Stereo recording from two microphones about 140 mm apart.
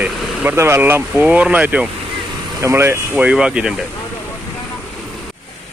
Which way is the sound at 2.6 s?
20° right (ahead or behind).